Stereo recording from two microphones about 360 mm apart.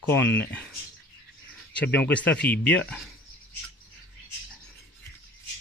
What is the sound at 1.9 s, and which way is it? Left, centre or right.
A man's voice, centre.